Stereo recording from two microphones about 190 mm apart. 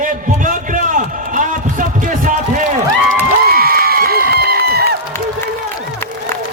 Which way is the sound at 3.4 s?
55° right (ahead or behind).